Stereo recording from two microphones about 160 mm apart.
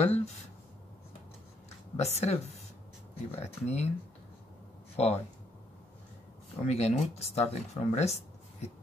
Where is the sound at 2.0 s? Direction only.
40° left (ahead or behind).